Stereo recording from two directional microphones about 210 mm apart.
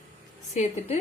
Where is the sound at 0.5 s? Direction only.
35° left (ahead or behind).